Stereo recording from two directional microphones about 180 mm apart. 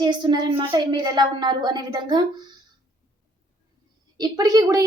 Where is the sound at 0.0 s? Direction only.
25° right (ahead or behind).